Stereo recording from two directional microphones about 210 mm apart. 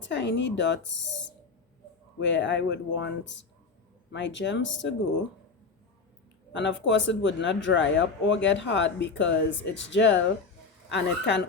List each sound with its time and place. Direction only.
0.0 s speech: 60° left (ahead or behind)
6.5 s speech: 60° left (ahead or behind)